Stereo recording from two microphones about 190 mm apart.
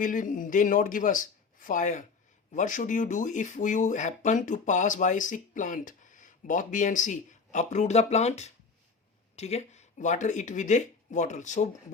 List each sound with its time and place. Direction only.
0.0 s speech: 45° left (ahead or behind)